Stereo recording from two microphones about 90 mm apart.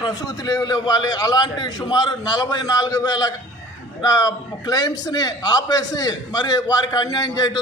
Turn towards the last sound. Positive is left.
turn(degrees=45)  # may be behind; listen again after turning